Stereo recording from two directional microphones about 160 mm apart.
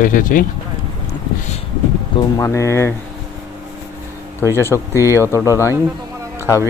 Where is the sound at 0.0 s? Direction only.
55° left (ahead or behind).